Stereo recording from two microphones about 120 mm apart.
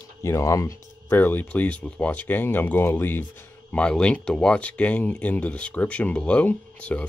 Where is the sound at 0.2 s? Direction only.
25° left (ahead or behind).